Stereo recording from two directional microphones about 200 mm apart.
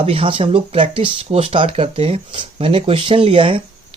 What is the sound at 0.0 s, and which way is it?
Speech, 30° right (ahead or behind).